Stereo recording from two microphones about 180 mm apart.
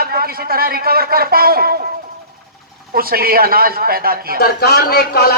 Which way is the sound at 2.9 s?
55° right (ahead or behind).